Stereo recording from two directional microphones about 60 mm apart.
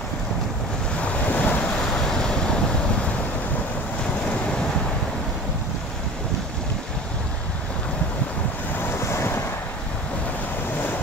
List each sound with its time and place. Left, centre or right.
0.9 s waves: left
1.7 s waves: centre
8.7 s waves: left